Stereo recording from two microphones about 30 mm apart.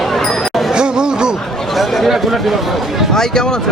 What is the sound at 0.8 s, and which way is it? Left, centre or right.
Chatter, right.